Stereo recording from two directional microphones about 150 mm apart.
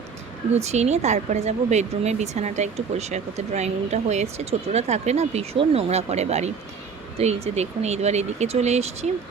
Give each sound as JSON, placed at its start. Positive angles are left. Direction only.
{"t": 0.5, "sound": "a woman's voice", "side_deg": -45}